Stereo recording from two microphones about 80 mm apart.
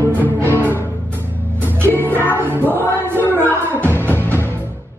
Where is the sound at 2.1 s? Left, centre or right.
Left.